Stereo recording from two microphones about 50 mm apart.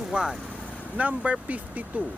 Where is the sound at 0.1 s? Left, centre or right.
Centre.